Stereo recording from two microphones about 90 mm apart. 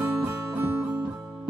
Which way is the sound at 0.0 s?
15° right (ahead or behind).